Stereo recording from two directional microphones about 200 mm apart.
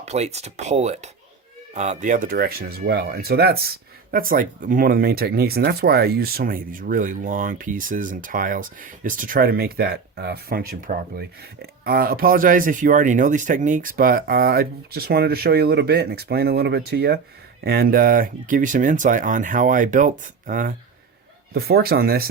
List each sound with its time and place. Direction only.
0.0 s speech: 35° right (ahead or behind); by 22.3 s 50° right (ahead or behind)